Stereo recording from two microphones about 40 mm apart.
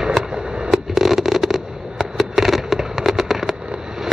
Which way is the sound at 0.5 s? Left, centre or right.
Right.